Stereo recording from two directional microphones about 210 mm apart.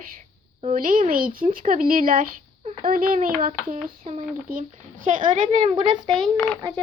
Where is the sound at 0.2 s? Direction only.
35° right (ahead or behind); by 6.0 s 20° right (ahead or behind).